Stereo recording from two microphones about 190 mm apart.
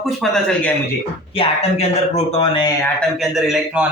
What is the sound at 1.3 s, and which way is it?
Speech, 30° left (ahead or behind).